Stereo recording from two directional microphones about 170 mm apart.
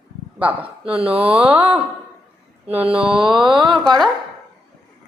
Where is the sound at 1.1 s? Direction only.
5° right (ahead or behind).